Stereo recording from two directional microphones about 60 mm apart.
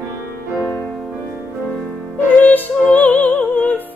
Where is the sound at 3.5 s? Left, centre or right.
Left.